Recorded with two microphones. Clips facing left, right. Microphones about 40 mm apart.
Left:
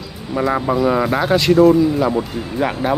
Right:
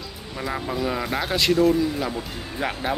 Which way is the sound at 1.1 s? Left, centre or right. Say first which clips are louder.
Left 6 dB; centre.